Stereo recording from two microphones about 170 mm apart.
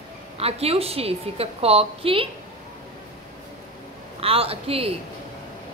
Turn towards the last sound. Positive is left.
turn(degrees=-35)  # may be behind; listen again after turning